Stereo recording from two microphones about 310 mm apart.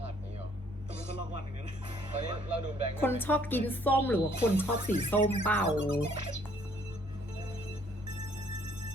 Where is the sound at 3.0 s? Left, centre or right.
Centre.